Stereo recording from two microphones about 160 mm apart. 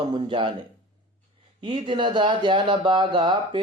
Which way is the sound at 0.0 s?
30° right (ahead or behind).